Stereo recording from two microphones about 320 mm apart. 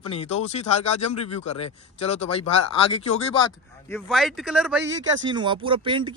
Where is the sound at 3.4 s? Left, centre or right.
Centre.